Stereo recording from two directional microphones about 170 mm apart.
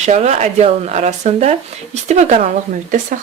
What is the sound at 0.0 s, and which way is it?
A woman's voice, 45° right (ahead or behind).